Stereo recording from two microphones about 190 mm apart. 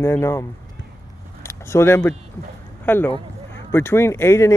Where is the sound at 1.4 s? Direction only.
15° left (ahead or behind).